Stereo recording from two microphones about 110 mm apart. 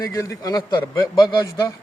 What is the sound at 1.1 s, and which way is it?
Speech, 45° left (ahead or behind).